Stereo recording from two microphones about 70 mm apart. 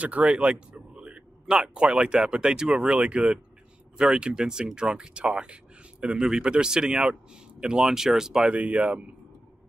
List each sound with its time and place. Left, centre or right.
0.0 s a sound: centre
1.7 s speech: centre
8.5 s speech: centre